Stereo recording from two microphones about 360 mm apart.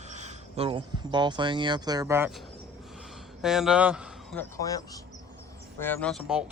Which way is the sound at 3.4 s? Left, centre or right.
Centre.